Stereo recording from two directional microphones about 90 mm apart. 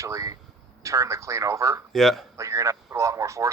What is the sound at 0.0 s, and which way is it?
Speech, 35° right (ahead or behind).